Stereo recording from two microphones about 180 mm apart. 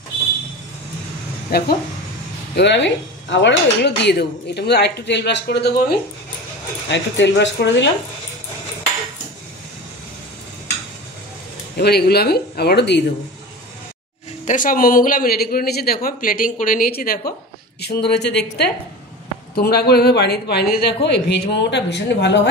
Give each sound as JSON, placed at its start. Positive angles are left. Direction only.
{"t": 1.5, "sound": "speech", "side_deg": 60}
{"t": 2.5, "sound": "dishes", "side_deg": 75}
{"t": 6.9, "sound": "speech", "side_deg": 80}
{"t": 11.7, "sound": "speech", "side_deg": 60}
{"t": 14.4, "sound": "speech", "side_deg": 45}
{"t": 17.7, "sound": "speech", "side_deg": 65}
{"t": 19.5, "sound": "dishes", "side_deg": 60}